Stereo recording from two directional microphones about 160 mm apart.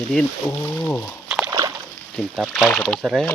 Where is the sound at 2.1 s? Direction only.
Centre (ahead or behind).